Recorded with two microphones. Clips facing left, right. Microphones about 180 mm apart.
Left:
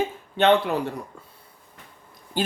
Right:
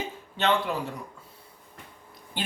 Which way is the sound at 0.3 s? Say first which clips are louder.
Left 7 dB; 60° left (ahead or behind).